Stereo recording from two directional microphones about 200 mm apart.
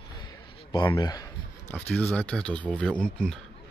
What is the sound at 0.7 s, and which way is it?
Speech, 20° left (ahead or behind).